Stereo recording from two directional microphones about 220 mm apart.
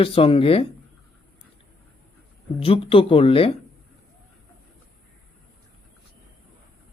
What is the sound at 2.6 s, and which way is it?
Speech, 25° left (ahead or behind).